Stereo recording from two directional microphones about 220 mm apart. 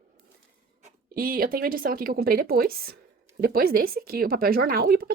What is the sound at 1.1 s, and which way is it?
A woman's voice, 40° right (ahead or behind).